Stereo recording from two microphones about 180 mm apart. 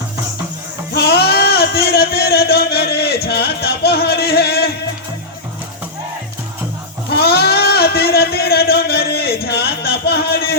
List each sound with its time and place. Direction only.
0.9 s speech: 65° left (ahead or behind)
7.2 s sheep: 60° left (ahead or behind)